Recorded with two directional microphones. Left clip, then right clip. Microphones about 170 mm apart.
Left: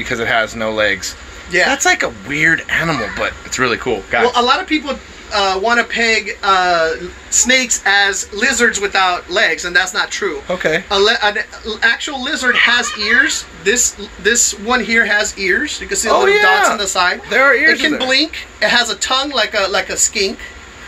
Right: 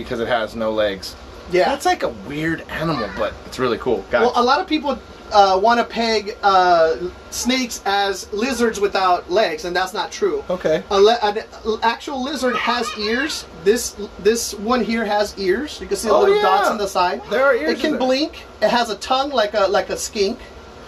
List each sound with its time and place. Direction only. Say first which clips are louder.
0.0 s speech: left 5 dB; 15° left (ahead or behind)
4.3 s speech: left 3 dB; 5° right (ahead or behind); by 13.1 s 30° right (ahead or behind)
14.2 s speech: left 4 dB; 25° right (ahead or behind); by 16.1 s 10° right (ahead or behind)
16.1 s a man's voice: left 3 dB; 25° left (ahead or behind)
16.8 s speech: left 4 dB; 10° right (ahead or behind)
17.3 s a man's voice: left 8 dB; 25° left (ahead or behind)
18.0 s speech: left 4 dB; 10° right (ahead or behind)